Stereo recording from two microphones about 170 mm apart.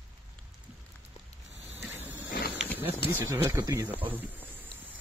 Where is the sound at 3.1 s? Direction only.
15° right (ahead or behind).